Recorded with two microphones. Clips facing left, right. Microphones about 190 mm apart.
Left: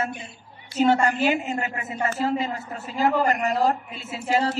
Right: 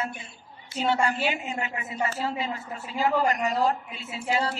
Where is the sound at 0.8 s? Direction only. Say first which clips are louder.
Left 5 dB; 45° left (ahead or behind).